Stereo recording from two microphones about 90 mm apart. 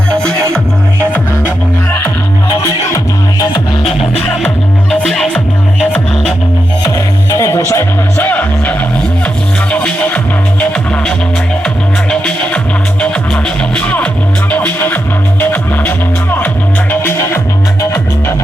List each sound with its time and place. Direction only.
0.2 s music: 5° left (ahead or behind)
2.6 s music: 35° left (ahead or behind)
4.9 s music: 5° left (ahead or behind)
6.8 s music: 35° left (ahead or behind); by 8.7 s 20° left (ahead or behind)
9.7 s music: 15° left (ahead or behind)
12.1 s music: 10° left (ahead or behind)